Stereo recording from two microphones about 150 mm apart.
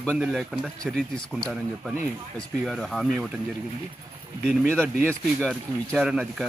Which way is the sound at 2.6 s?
Centre (ahead or behind).